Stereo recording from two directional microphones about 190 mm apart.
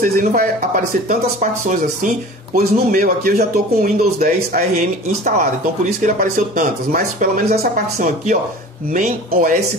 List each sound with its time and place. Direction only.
0.0 s speech: 50° right (ahead or behind)